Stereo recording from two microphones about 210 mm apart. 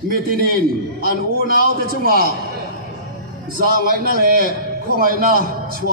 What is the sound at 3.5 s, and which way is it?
A man's voice, 45° right (ahead or behind).